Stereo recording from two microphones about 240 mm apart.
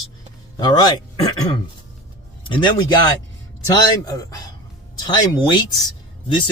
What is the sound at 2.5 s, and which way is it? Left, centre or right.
Speech, centre.